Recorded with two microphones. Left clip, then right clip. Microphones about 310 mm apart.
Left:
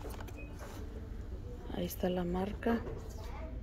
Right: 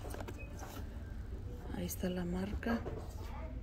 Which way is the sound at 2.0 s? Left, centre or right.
Centre.